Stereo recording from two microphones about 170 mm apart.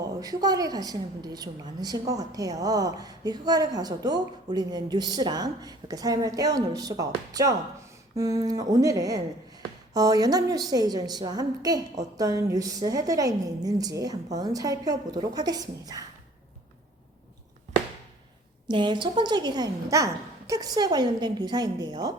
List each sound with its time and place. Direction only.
0.2 s a woman's voice: 20° right (ahead or behind)
18.7 s a woman's voice: 25° right (ahead or behind)